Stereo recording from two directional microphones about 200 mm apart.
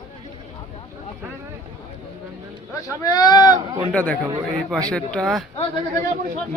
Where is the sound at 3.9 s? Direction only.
5° left (ahead or behind).